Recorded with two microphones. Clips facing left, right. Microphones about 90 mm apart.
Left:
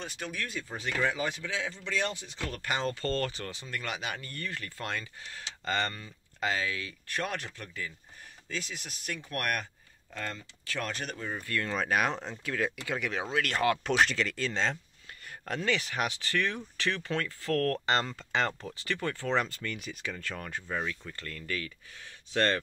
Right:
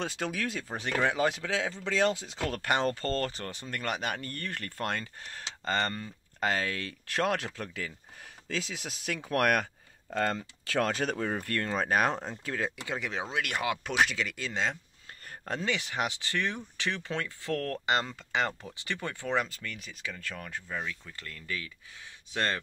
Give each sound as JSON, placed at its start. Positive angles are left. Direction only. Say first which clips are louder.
{"t": 0.0, "sound": "speech", "louder": "right 5 dB", "side_deg": -90}
{"t": 0.9, "sound": "speech", "louder": "right 4 dB", "side_deg": -60}
{"t": 2.5, "sound": "speech", "louder": "right 4 dB", "side_deg": -60}
{"t": 3.0, "sound": "speech", "louder": "even", "side_deg": -40}
{"t": 11.3, "sound": "speech", "louder": "right 1 dB", "side_deg": -50}
{"t": 11.7, "sound": "speech", "louder": "right 2 dB", "side_deg": -35}
{"t": 12.4, "sound": "speech", "louder": "left 2 dB", "side_deg": -25}
{"t": 15.2, "sound": "speech", "louder": "left 1 dB", "side_deg": -30}
{"t": 21.2, "sound": "speech", "louder": "left 2 dB", "side_deg": -10}